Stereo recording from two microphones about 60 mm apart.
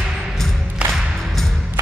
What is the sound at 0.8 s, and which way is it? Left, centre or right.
Music, right.